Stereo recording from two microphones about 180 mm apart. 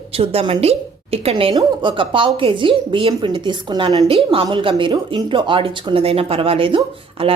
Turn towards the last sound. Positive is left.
turn(degrees=-30)  # may be behind; listen again after turning